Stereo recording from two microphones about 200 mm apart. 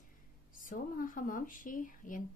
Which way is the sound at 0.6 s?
40° left (ahead or behind).